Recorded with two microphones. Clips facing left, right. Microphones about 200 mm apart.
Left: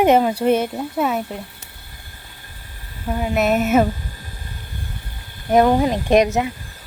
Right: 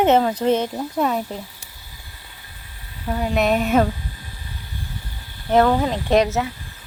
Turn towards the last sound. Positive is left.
turn(degrees=15)  # may be behind; listen again after turning